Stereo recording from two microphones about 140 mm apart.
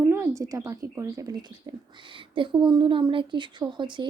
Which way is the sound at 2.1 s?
35° right (ahead or behind).